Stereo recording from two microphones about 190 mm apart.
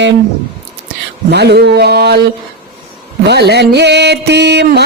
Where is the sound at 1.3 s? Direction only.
60° right (ahead or behind).